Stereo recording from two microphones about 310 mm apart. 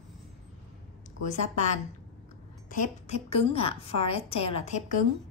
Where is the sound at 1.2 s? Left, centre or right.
Left.